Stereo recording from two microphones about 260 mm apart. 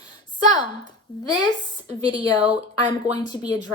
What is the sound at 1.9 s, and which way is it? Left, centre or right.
Speech, centre.